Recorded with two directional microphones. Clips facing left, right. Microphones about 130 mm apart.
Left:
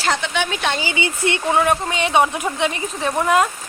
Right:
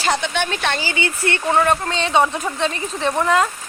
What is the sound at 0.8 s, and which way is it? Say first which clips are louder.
Speech: left 1 dB; 15° left (ahead or behind).